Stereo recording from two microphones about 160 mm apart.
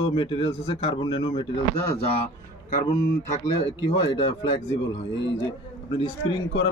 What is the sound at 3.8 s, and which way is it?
Speech, 30° left (ahead or behind).